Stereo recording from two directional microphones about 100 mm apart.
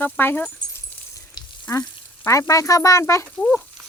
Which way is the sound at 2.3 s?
30° left (ahead or behind).